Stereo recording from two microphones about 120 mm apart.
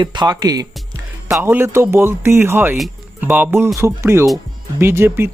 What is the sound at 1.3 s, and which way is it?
Speech, 20° right (ahead or behind).